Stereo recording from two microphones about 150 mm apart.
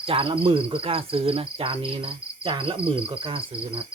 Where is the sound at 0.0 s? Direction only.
40° right (ahead or behind).